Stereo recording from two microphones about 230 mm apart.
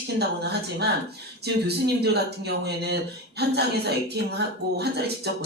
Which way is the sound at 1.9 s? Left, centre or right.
Right.